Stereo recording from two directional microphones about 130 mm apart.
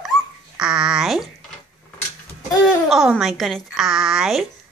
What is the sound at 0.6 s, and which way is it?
Speech, 5° right (ahead or behind).